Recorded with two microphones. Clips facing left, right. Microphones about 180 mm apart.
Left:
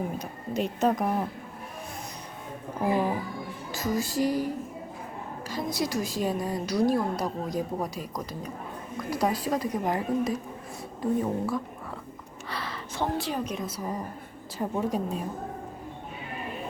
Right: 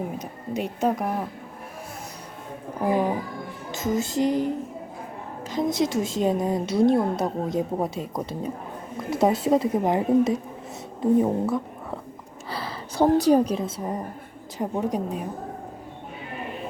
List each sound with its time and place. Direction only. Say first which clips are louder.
0.2 s speech: right 1 dB; 15° right (ahead or behind)
2.8 s a woman's voice: right 3 dB; 15° right (ahead or behind)